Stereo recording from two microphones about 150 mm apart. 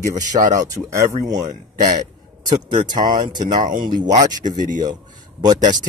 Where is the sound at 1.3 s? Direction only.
55° right (ahead or behind).